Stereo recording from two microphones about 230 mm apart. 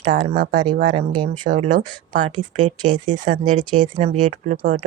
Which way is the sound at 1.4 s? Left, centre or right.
Right.